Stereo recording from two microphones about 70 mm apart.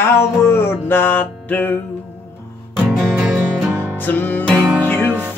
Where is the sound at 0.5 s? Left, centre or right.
Left.